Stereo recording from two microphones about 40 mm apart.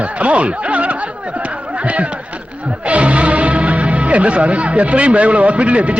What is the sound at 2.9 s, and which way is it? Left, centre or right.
Speech, right.